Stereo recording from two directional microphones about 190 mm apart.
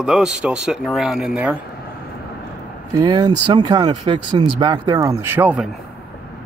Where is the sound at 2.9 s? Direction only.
20° right (ahead or behind).